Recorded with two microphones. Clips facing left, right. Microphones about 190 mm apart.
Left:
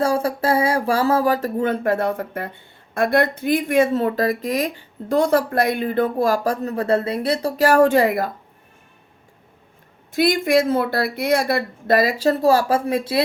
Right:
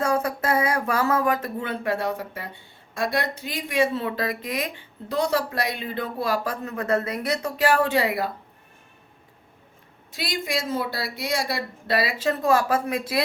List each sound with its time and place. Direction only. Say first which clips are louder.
0.0 s speech: left 4 dB; 30° left (ahead or behind); by 8.3 s 50° left (ahead or behind)
10.1 s speech: left 12 dB; 55° left (ahead or behind); by 13.2 s 30° left (ahead or behind)